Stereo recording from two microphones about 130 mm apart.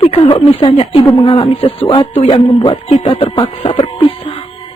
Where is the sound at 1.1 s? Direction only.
35° left (ahead or behind).